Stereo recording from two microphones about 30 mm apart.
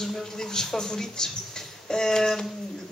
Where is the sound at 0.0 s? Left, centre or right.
Centre.